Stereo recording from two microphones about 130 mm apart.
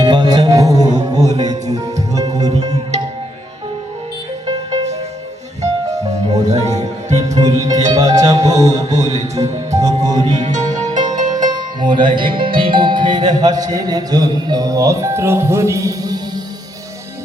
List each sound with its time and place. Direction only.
0.0 s music: 35° right (ahead or behind)
5.6 s music: 25° right (ahead or behind)
6.4 s music: 60° right (ahead or behind)
7.7 s music: 30° right (ahead or behind)
8.9 s music: 60° right (ahead or behind)
9.7 s music: 25° right (ahead or behind)
10.1 s music: 60° right (ahead or behind)
10.9 s music: 30° right (ahead or behind)